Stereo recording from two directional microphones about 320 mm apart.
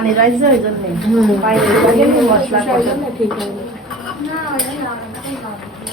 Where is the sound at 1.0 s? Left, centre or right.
Centre.